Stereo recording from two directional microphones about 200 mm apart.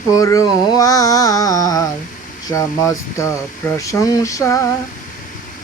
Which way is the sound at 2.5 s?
15° left (ahead or behind).